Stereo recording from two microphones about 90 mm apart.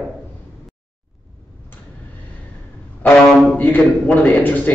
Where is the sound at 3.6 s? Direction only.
15° left (ahead or behind).